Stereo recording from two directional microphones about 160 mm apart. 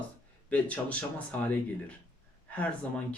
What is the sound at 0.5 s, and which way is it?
Speech, 10° left (ahead or behind).